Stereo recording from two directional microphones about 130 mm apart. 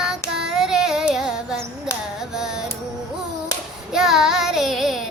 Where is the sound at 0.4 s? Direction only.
Centre (ahead or behind).